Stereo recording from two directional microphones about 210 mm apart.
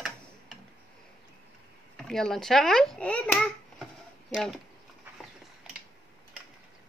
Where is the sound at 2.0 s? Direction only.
Centre (ahead or behind).